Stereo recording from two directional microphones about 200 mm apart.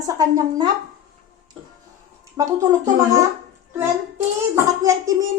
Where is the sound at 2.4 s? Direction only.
15° right (ahead or behind).